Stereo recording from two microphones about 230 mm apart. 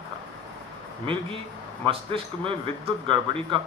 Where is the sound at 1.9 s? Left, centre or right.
Right.